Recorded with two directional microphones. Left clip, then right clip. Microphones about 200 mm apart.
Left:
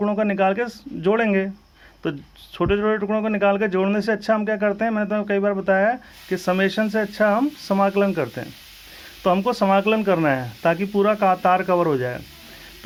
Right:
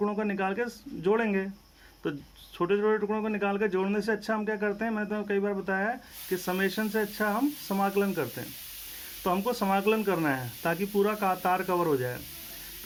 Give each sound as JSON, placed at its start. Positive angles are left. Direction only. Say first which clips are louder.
{"t": 0.0, "sound": "speech", "louder": "left 10 dB", "side_deg": 40}